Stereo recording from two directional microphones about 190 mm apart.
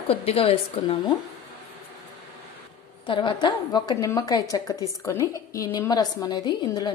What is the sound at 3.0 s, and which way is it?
A woman's voice, 25° left (ahead or behind).